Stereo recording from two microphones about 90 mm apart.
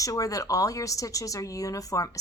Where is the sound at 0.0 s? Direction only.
40° left (ahead or behind).